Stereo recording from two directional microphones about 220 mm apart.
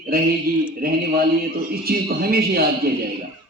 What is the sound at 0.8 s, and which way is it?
A man's voice, 40° right (ahead or behind).